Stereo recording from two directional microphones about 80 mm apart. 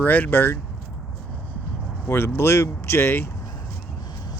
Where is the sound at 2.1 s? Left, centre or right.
Left.